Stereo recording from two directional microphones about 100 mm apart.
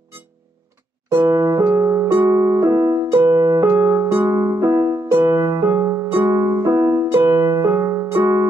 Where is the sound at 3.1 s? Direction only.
25° right (ahead or behind).